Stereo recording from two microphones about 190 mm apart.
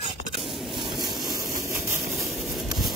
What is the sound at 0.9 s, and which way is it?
Vehicle, 20° right (ahead or behind).